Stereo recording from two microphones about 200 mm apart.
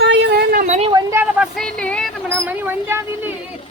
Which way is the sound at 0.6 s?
35° right (ahead or behind).